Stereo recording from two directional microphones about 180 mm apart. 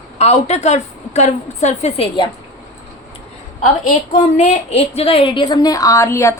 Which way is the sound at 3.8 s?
40° left (ahead or behind).